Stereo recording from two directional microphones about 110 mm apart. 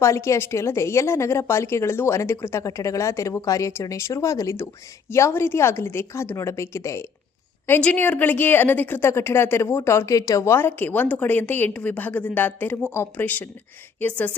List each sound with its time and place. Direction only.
0.0 s a woman's voice: 25° left (ahead or behind)
7.7 s a woman's voice: 15° left (ahead or behind)